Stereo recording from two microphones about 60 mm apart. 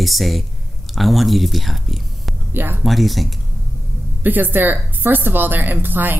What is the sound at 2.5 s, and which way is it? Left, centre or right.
Speech, right.